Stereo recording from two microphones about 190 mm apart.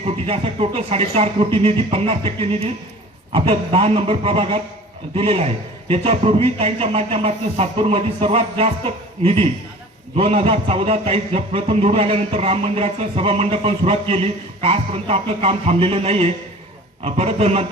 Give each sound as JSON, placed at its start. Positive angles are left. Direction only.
{"t": 0.0, "sound": "a man's voice", "side_deg": -30}